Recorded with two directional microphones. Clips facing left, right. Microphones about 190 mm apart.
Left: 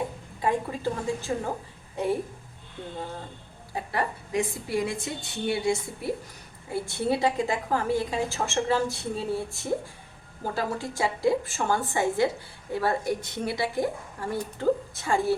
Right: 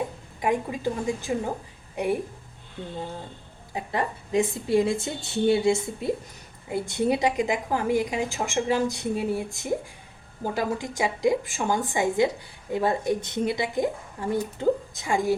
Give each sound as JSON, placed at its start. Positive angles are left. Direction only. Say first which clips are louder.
{"t": 0.4, "sound": "a woman's voice", "louder": "right 1 dB", "side_deg": -15}
{"t": 3.8, "sound": "a woman's voice", "louder": "right 1 dB", "side_deg": -20}